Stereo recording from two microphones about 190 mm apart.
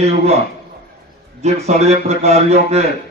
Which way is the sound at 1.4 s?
35° right (ahead or behind).